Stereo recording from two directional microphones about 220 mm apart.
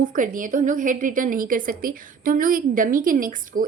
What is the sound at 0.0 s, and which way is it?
A woman's voice, 35° right (ahead or behind).